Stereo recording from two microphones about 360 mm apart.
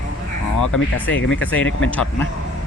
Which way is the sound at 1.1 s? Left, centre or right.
Left.